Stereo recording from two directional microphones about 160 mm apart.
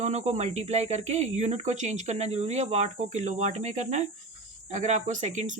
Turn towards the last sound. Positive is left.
turn(degrees=-45)  # may be behind; listen again after turning